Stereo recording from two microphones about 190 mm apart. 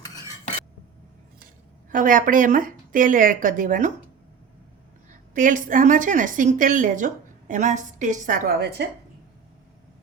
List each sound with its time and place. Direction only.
1.9 s a woman's voice: 45° right (ahead or behind)
5.3 s a woman's voice: 45° right (ahead or behind); by 8.9 s 60° right (ahead or behind)